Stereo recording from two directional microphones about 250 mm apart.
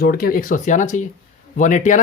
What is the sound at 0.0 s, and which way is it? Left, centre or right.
Speech, left.